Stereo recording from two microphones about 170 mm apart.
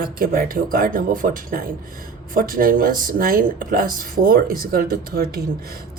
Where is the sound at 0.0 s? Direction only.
55° right (ahead or behind).